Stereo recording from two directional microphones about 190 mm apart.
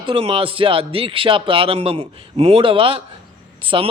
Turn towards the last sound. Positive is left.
turn(degrees=-30)  # may be behind; listen again after turning